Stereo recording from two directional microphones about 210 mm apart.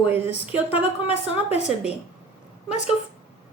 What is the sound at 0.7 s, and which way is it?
Speech, 30° left (ahead or behind).